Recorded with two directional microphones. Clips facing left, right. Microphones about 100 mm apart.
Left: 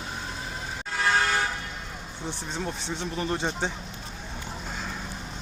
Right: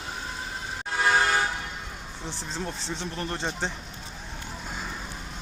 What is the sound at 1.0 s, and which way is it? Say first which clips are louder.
Vehicle: right 1 dB; 15° right (ahead or behind).